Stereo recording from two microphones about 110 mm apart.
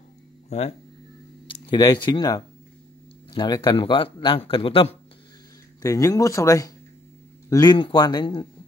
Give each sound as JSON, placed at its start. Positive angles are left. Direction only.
{"t": 0.5, "sound": "speech", "side_deg": 75}
{"t": 1.7, "sound": "speech", "side_deg": 40}
{"t": 5.8, "sound": "speech", "side_deg": 30}
{"t": 7.6, "sound": "speech", "side_deg": 45}